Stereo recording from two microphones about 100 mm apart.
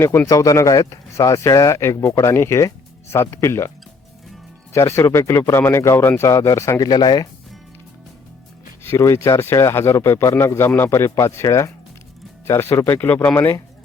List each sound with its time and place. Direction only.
0.3 s speech: 35° left (ahead or behind)
4.7 s speech: 25° left (ahead or behind)
6.8 s speech: 45° left (ahead or behind)
8.8 s speech: 25° left (ahead or behind)